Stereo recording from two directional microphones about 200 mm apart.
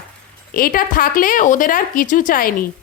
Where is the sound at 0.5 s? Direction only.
45° left (ahead or behind).